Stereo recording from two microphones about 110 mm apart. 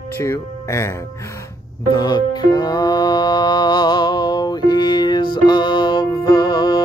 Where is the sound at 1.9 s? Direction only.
40° left (ahead or behind).